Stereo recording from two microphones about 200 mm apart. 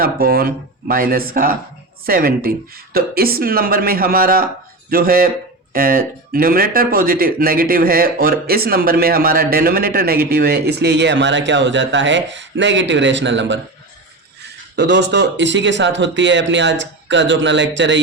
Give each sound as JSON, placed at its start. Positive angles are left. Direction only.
{"t": 0.0, "sound": "speech", "side_deg": -50}
{"t": 14.8, "sound": "speech", "side_deg": -60}